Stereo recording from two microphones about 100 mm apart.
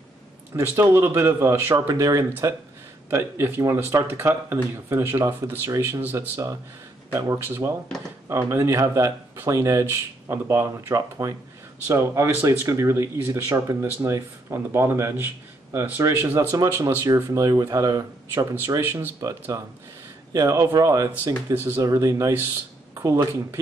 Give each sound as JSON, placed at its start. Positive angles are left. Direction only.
{"t": 0.6, "sound": "speech", "side_deg": -25}
{"t": 1.9, "sound": "speech", "side_deg": -35}
{"t": 3.1, "sound": "speech", "side_deg": -25}
{"t": 21.5, "sound": "speech", "side_deg": -20}
{"t": 21.8, "sound": "speech", "side_deg": -30}